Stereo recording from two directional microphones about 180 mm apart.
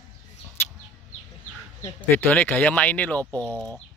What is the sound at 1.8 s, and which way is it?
Speech, 10° left (ahead or behind).